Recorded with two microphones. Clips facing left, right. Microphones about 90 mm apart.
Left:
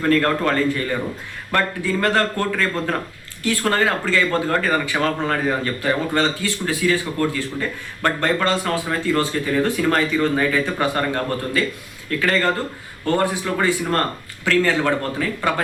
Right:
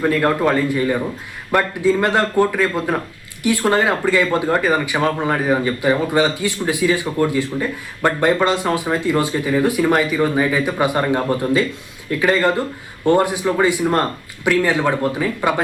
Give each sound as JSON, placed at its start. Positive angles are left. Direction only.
{"t": 0.0, "sound": "speech", "side_deg": -15}